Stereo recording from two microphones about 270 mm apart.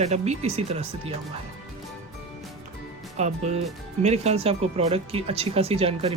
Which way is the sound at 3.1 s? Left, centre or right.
Right.